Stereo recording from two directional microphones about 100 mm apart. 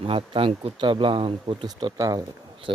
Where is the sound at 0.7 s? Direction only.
50° right (ahead or behind).